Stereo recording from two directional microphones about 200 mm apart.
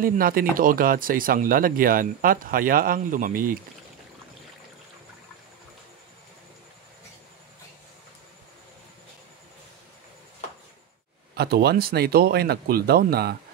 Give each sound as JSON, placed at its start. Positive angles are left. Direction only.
{"t": 0.0, "sound": "speech", "side_deg": -45}
{"t": 11.3, "sound": "speech", "side_deg": -55}